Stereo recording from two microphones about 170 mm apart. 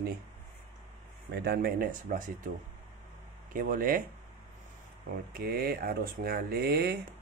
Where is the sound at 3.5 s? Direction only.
55° right (ahead or behind).